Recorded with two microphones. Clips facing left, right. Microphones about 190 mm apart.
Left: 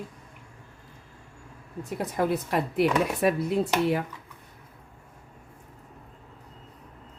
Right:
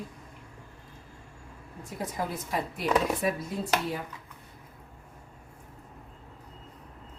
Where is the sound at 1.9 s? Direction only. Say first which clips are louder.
Left 7 dB; 65° left (ahead or behind).